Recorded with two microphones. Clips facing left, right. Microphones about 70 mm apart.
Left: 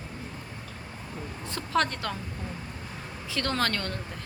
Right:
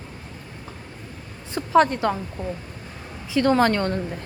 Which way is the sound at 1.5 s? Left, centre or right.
Centre.